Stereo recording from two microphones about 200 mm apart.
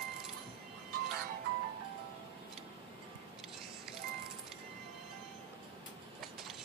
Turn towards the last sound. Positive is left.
turn(degrees=0)  # may be behind; listen again after turning